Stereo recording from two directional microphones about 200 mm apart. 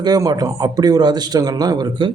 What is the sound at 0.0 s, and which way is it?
Speech, 20° right (ahead or behind).